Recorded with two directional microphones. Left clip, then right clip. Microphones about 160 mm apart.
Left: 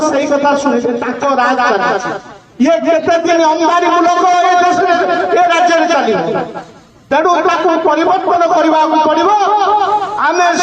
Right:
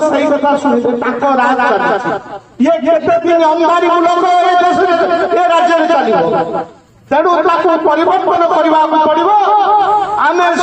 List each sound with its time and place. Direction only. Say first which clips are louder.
0.0 s a man's voice: right 1 dB; 20° left (ahead or behind)